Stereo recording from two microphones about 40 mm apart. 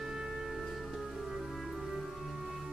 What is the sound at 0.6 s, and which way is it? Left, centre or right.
Music, centre.